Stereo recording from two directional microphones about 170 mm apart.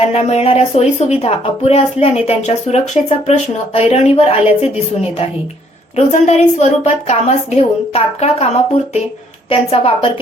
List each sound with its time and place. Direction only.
0.1 s speech: 35° left (ahead or behind)
6.0 s speech: 40° left (ahead or behind)
9.5 s speech: 35° left (ahead or behind)